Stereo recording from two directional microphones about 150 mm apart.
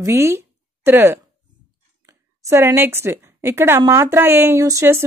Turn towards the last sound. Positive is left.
turn(degrees=-20)  # may be behind; listen again after turning